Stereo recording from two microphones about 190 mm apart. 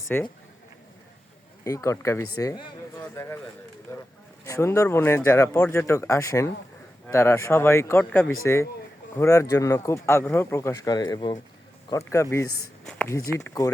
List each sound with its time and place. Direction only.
0.1 s a man's voice: 10° left (ahead or behind)
1.6 s a man's voice: 15° left (ahead or behind)